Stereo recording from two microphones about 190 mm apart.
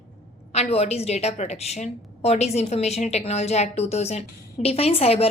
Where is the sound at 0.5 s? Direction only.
35° left (ahead or behind).